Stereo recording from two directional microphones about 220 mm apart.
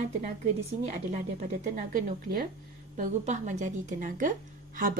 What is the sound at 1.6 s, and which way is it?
Speech, 35° right (ahead or behind).